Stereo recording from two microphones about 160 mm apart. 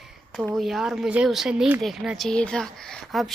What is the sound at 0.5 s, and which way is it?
Speech, centre (ahead or behind).